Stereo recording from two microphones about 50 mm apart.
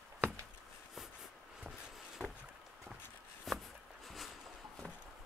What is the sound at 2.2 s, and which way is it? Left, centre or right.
Vehicle, left.